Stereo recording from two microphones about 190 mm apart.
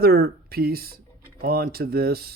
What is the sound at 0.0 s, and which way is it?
Speech, 55° right (ahead or behind).